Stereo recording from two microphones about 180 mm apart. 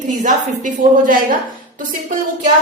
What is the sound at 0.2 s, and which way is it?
A woman's voice, 45° right (ahead or behind).